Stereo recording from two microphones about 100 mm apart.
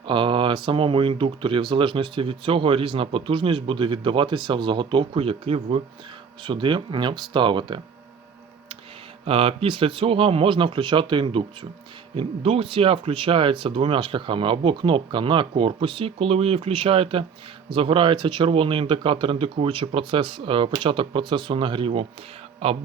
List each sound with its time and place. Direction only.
0.1 s speech: 55° right (ahead or behind); by 5.8 s 75° right (ahead or behind)
6.4 s speech: 55° right (ahead or behind)
9.2 s speech: 70° right (ahead or behind)
12.1 s speech: 75° right (ahead or behind)
22.6 s speech: 75° right (ahead or behind)